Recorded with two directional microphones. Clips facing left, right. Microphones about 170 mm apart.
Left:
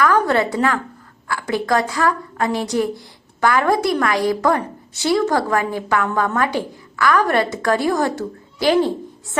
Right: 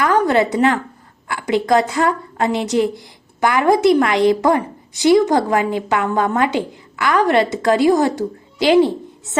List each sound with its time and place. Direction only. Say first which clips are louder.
0.0 s a woman's voice: right 2 dB; 20° right (ahead or behind)